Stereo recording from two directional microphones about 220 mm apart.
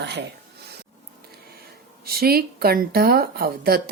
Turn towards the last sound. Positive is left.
turn(degrees=-45)  # may be behind; listen again after turning